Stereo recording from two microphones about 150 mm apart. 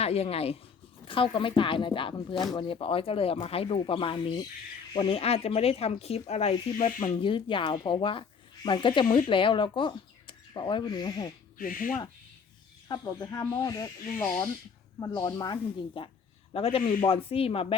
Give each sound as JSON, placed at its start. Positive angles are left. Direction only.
{"t": 0.0, "sound": "speech", "side_deg": 45}
{"t": 7.2, "sound": "speech", "side_deg": 35}
{"t": 11.5, "sound": "speech", "side_deg": 65}
{"t": 12.9, "sound": "speech", "side_deg": 25}
{"t": 14.9, "sound": "speech", "side_deg": 25}
{"t": 16.0, "sound": "speech", "side_deg": 35}